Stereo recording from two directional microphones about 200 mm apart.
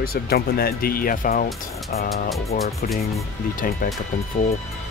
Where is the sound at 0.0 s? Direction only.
50° left (ahead or behind).